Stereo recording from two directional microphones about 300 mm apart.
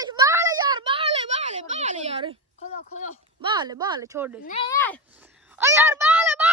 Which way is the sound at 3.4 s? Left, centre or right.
Centre.